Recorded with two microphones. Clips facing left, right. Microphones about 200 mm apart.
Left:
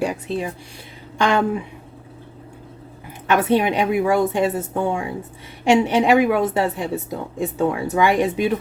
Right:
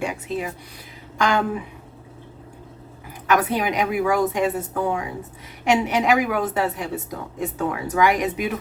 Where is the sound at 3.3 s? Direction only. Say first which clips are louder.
Left 3 dB; 25° left (ahead or behind).